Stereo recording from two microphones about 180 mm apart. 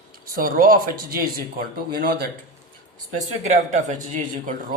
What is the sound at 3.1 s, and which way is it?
Speech, 40° right (ahead or behind).